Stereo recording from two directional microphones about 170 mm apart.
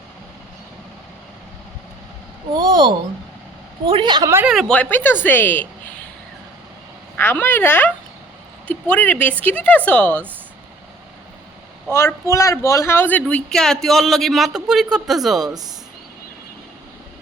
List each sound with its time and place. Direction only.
2.6 s a woman's voice: 25° right (ahead or behind)
4.4 s speech: centre (ahead or behind)
7.2 s speech: 10° left (ahead or behind)
11.9 s speech: 15° left (ahead or behind); by 15.4 s centre (ahead or behind)